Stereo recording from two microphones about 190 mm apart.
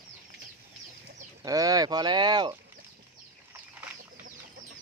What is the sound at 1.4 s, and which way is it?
Speech, 20° right (ahead or behind).